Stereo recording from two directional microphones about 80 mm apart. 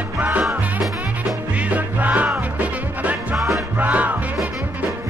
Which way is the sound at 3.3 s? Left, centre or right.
Centre.